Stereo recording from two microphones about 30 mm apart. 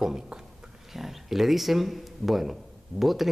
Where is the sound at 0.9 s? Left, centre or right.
Centre.